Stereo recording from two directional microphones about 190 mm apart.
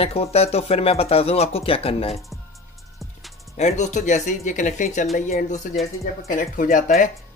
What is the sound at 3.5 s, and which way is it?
Speech, 35° left (ahead or behind).